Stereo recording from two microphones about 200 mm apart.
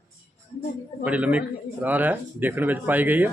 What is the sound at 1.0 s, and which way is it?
Speech, 5° right (ahead or behind).